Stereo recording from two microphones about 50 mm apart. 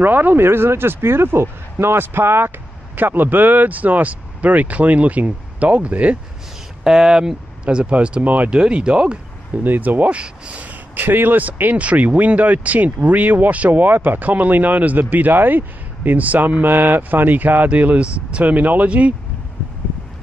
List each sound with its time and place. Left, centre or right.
0.0 s speech: right
6.8 s speech: centre; by 8.5 s right
8.5 s speech: centre
9.6 s speech: right
11.0 s speech: right
11.7 s speech: right